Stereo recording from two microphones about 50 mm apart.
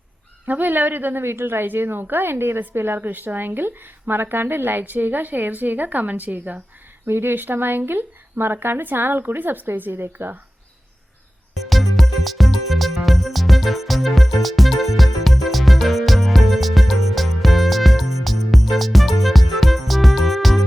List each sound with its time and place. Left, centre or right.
0.4 s speech: right
7.0 s speech: right
11.7 s music: centre